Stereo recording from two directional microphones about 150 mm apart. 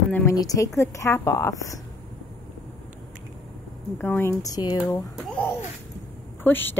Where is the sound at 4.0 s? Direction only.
15° left (ahead or behind).